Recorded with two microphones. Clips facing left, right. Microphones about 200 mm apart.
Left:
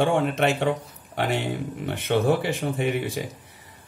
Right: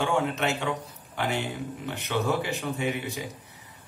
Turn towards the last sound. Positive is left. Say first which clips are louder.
# left 4 dB
turn(degrees=55)  # may be behind; listen again after turning